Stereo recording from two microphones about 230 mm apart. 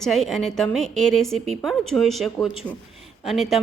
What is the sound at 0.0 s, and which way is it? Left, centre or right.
A woman's voice, centre.